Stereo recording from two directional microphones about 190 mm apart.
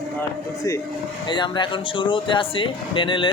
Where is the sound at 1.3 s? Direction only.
25° left (ahead or behind).